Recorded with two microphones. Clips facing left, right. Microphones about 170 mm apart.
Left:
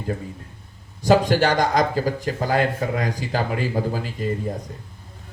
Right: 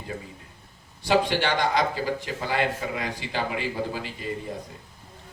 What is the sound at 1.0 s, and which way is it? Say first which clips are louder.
Speech: left 6 dB; 45° left (ahead or behind).